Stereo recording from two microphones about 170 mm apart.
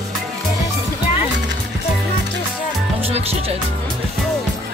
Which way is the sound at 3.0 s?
35° right (ahead or behind).